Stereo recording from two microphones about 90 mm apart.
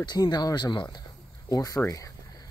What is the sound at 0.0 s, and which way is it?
Speech, 50° left (ahead or behind).